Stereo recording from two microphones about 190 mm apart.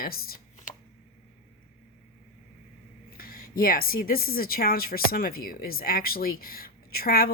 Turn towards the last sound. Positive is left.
turn(degrees=50)  # may be behind; listen again after turning